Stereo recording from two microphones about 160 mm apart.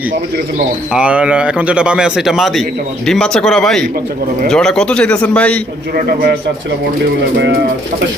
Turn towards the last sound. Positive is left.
turn(degrees=-65)  # may be behind; listen again after turning